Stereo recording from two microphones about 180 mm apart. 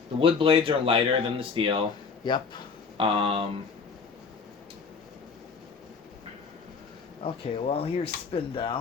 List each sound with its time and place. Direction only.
0.2 s speech: 30° right (ahead or behind)
2.2 s speech: 25° left (ahead or behind)
3.0 s speech: 30° right (ahead or behind)
7.2 s speech: 35° left (ahead or behind)